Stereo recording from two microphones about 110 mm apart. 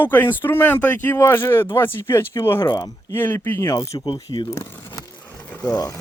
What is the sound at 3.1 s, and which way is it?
Speech, 20° left (ahead or behind).